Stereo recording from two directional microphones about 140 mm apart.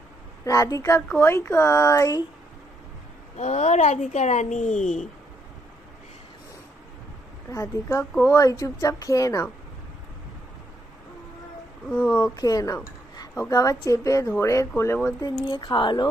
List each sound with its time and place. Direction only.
0.4 s speech: 25° left (ahead or behind)
3.3 s speech: 55° left (ahead or behind)
7.5 s speech: 25° left (ahead or behind)
11.9 s speech: 10° left (ahead or behind)
12.2 s speech: 25° left (ahead or behind)
15.4 s speech: 35° left (ahead or behind)